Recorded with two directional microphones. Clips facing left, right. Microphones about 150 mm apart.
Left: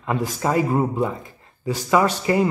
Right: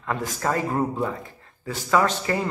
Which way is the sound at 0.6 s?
5° left (ahead or behind).